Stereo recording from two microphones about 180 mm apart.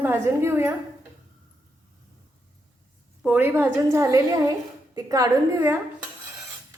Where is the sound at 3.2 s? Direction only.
10° right (ahead or behind).